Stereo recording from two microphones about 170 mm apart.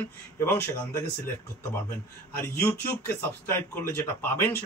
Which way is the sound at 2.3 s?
15° left (ahead or behind).